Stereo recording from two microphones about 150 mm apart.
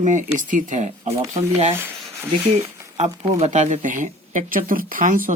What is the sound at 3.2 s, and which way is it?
Speech, 45° right (ahead or behind).